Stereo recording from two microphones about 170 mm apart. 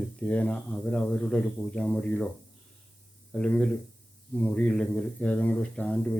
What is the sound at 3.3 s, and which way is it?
Speech, 5° left (ahead or behind).